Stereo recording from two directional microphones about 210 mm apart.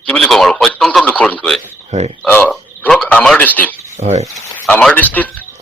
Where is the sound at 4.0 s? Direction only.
35° right (ahead or behind).